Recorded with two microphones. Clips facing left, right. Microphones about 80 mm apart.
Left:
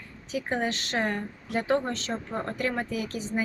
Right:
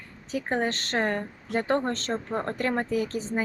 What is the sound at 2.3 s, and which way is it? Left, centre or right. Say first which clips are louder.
Speech: right 2 dB; right.